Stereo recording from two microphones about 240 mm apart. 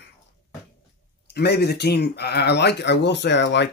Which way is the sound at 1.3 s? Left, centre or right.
Left.